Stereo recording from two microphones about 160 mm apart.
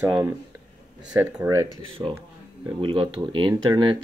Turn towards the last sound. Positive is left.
turn(degrees=-30)  # may be behind; listen again after turning